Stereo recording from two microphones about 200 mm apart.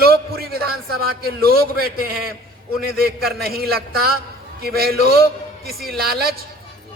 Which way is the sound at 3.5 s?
50° right (ahead or behind).